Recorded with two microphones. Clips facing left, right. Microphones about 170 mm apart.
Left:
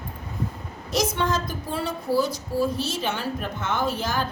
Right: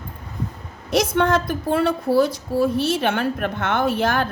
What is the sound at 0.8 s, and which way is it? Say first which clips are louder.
A woman's voice: right 6 dB; 60° right (ahead or behind).